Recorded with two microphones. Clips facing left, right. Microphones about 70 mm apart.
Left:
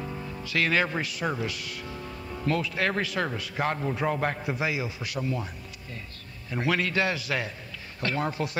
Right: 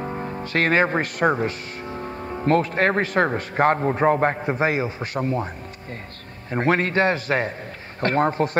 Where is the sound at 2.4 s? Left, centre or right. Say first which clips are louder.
Right 8 dB; right.